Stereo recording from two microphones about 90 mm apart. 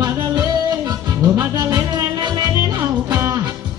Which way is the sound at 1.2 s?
30° right (ahead or behind).